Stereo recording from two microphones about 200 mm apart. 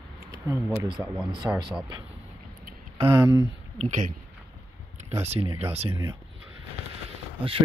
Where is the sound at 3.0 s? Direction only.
20° right (ahead or behind).